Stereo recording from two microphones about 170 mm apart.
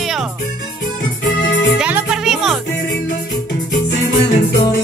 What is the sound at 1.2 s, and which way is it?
Music, 90° left.